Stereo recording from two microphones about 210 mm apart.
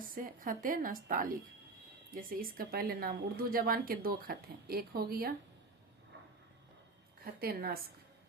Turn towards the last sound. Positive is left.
turn(degrees=-45)  # may be behind; listen again after turning